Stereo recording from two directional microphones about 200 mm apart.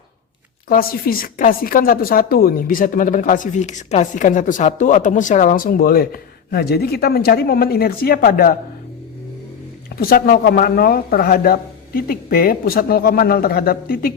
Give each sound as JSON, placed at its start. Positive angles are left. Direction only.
{"t": 0.7, "sound": "a woman's voice", "side_deg": 45}
{"t": 9.9, "sound": "a woman's voice", "side_deg": 50}